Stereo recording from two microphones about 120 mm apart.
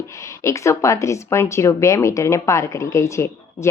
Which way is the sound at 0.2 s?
25° left (ahead or behind).